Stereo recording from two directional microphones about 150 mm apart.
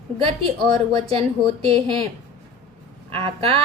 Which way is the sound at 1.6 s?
40° right (ahead or behind).